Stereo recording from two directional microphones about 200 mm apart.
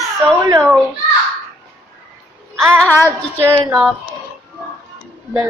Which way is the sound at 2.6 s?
5° left (ahead or behind).